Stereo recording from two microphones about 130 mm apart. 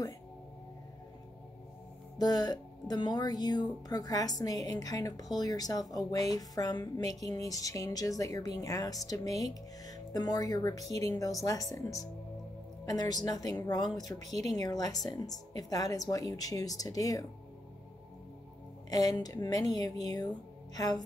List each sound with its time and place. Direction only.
2.1 s speech: 30° left (ahead or behind)
18.9 s speech: 30° left (ahead or behind)